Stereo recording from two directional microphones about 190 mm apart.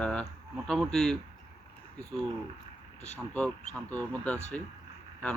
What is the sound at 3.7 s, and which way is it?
Speech, 10° left (ahead or behind).